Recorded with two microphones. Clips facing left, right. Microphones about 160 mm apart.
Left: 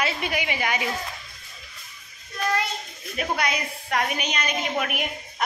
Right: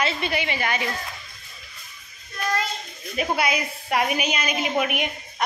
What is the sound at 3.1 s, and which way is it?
A woman's voice, 5° right (ahead or behind).